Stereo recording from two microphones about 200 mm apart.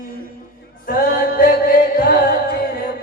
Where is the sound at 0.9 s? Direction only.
45° left (ahead or behind).